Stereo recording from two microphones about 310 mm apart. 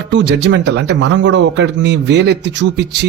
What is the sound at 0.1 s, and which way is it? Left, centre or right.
Speech, right.